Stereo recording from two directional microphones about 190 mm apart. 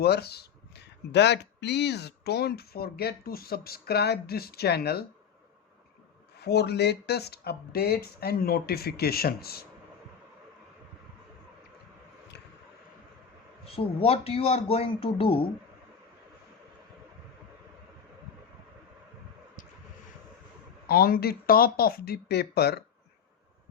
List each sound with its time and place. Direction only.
0.0 s speech: 55° left (ahead or behind)
6.4 s speech: 60° left (ahead or behind)
13.7 s speech: 30° left (ahead or behind)
20.8 s speech: 50° left (ahead or behind)